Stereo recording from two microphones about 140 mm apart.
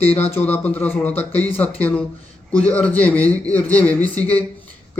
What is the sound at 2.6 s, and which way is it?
Speech, 10° left (ahead or behind).